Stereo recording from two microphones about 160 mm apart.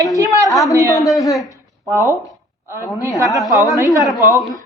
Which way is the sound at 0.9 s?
20° left (ahead or behind).